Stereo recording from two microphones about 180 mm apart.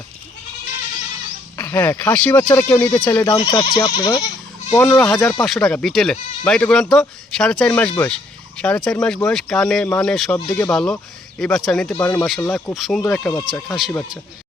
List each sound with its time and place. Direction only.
1.5 s speech: 10° left (ahead or behind)
4.8 s speech: 5° left (ahead or behind)
5.2 s speech: 20° left (ahead or behind)
5.5 s speech: 5° left (ahead or behind)